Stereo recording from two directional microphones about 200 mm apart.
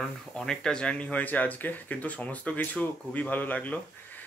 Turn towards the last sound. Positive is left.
turn(degrees=10)  # may be behind; listen again after turning